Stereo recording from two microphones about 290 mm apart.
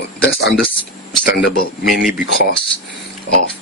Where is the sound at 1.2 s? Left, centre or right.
Left.